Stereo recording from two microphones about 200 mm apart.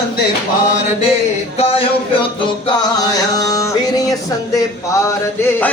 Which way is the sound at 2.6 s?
20° left (ahead or behind).